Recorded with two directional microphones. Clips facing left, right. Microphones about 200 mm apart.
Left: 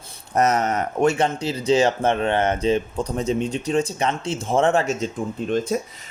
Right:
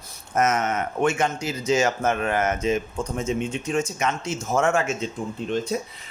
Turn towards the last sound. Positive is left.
turn(degrees=45)  # may be behind; listen again after turning